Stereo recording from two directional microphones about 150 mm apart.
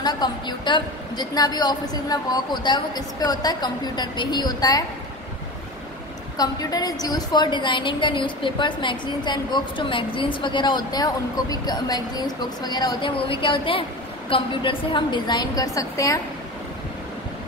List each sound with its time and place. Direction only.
0.0 s a woman's voice: 30° left (ahead or behind)
6.3 s a woman's voice: 25° left (ahead or behind)